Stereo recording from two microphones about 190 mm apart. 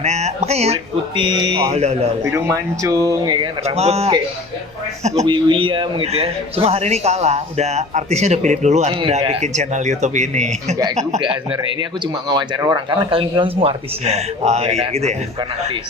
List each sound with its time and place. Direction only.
0.0 s a man's voice: 35° right (ahead or behind)
1.7 s a man's voice: 35° right (ahead or behind)
2.2 s speech: 15° right (ahead or behind); by 4.1 s 35° right (ahead or behind)
5.2 s a man's voice: 25° right (ahead or behind)
12.3 s speech: 20° right (ahead or behind)